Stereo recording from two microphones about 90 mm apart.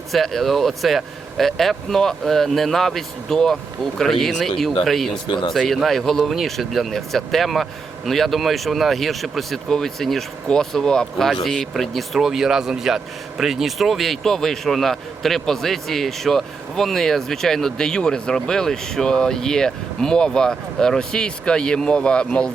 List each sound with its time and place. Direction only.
0.1 s speech: centre (ahead or behind)
5.3 s speech: 60° left (ahead or behind)
5.5 s speech: centre (ahead or behind)